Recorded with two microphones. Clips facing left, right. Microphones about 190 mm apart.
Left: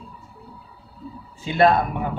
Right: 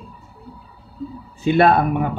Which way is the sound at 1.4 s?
65° right (ahead or behind).